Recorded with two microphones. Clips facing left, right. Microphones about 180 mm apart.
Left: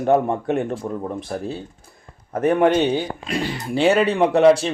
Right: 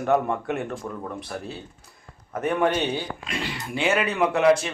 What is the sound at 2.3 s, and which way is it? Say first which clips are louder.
Speech: left 6 dB; 40° left (ahead or behind).